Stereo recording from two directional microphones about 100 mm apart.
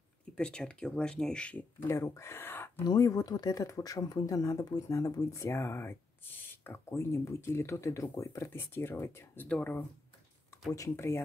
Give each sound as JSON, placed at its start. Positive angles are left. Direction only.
{"t": 0.4, "sound": "speech", "side_deg": 10}
{"t": 1.9, "sound": "speech", "side_deg": 30}
{"t": 2.8, "sound": "speech", "side_deg": 40}
{"t": 10.7, "sound": "speech", "side_deg": 30}